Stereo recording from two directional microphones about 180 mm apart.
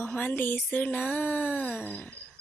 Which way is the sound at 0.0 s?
10° left (ahead or behind).